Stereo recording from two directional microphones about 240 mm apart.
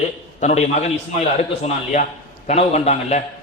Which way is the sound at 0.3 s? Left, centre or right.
Left.